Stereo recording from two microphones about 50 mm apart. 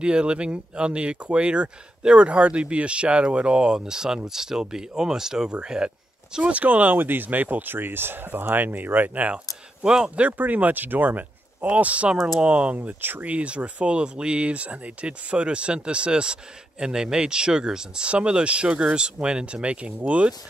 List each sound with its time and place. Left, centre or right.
0.0 s speech: centre; by 9.3 s right
9.3 s speech: centre
10.2 s speech: right
12.7 s speech: right
13.3 s speech: right